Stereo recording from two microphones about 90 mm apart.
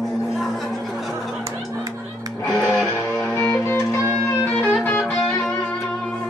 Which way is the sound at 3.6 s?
30° left (ahead or behind).